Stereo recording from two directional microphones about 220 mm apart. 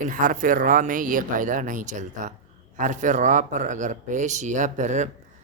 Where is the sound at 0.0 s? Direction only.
40° right (ahead or behind).